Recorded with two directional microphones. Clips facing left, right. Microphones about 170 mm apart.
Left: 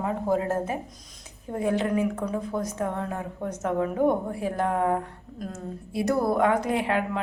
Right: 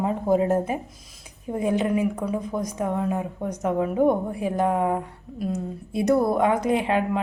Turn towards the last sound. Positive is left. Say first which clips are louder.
# right 3 dB
turn(degrees=-20)  # may be behind; listen again after turning